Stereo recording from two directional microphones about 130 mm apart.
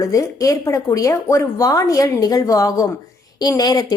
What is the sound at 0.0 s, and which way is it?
A woman's voice, 25° left (ahead or behind).